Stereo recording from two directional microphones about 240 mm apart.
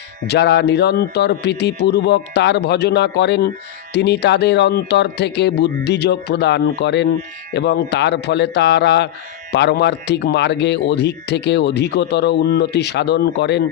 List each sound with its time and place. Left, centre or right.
0.3 s speech: left